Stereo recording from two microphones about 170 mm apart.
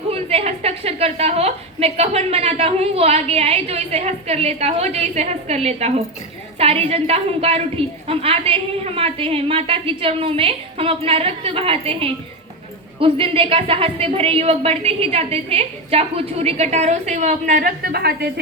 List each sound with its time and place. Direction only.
0.1 s a woman's voice: 35° right (ahead or behind); by 18.3 s 70° right (ahead or behind)